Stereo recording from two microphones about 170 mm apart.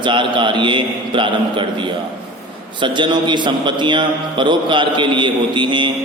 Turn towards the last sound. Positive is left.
turn(degrees=-30)  # may be behind; listen again after turning